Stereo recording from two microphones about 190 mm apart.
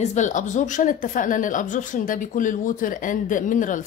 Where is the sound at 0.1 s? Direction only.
40° left (ahead or behind).